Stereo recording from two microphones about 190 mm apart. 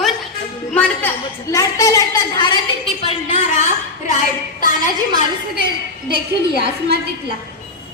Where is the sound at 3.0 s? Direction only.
30° left (ahead or behind).